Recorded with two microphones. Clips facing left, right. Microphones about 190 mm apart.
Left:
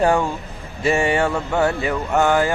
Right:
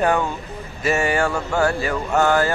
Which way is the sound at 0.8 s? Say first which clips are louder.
Left 2 dB; 25° left (ahead or behind).